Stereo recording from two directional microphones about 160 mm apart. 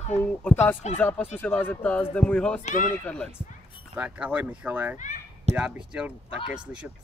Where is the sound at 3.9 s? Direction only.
10° right (ahead or behind).